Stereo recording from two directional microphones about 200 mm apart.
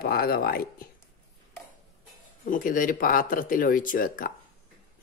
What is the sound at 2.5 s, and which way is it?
Speech, 45° left (ahead or behind).